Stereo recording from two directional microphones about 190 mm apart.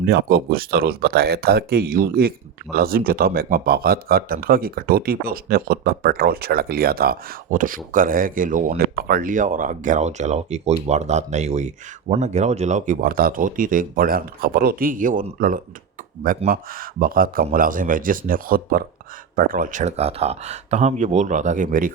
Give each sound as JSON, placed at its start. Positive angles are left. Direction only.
{"t": 0.0, "sound": "speech", "side_deg": -55}